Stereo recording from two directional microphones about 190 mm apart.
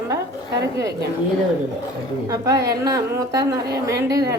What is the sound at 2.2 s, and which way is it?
A woman's voice, 15° right (ahead or behind).